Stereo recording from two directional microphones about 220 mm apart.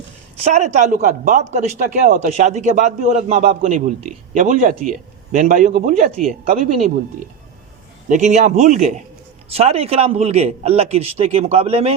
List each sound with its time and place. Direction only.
0.4 s a man's voice: 30° right (ahead or behind)
8.0 s a man's voice: 35° right (ahead or behind)